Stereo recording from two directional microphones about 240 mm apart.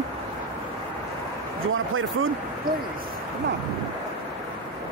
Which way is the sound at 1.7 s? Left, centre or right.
Right.